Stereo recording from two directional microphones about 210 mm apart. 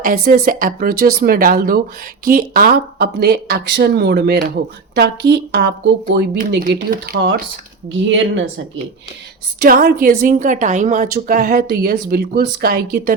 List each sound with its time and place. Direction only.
0.0 s a woman's voice: 40° right (ahead or behind)
8.0 s a woman's voice: 65° right (ahead or behind)
9.6 s a woman's voice: 45° right (ahead or behind)